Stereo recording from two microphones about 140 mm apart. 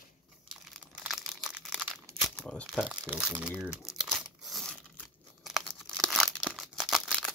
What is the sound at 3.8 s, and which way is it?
Tearing, 5° right (ahead or behind).